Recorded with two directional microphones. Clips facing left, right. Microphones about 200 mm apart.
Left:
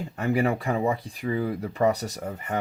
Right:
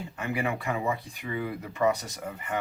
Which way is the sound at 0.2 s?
40° left (ahead or behind).